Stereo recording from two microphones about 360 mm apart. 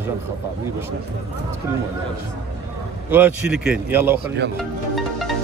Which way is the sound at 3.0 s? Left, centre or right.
Centre.